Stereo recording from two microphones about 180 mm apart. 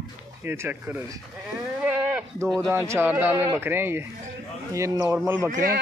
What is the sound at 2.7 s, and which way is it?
Speech, 15° right (ahead or behind).